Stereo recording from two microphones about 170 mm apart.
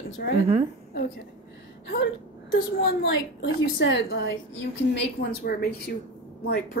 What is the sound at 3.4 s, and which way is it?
Speech, 90° left.